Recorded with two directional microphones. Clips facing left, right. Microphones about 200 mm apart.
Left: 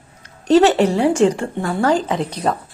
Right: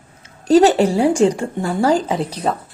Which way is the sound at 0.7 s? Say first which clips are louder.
Even; 35° right (ahead or behind).